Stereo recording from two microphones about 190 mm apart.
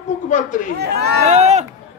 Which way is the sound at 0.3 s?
40° left (ahead or behind).